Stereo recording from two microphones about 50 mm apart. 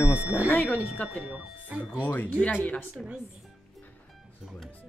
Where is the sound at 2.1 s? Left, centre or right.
Left.